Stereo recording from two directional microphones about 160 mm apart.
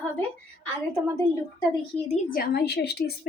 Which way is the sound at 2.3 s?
70° left (ahead or behind).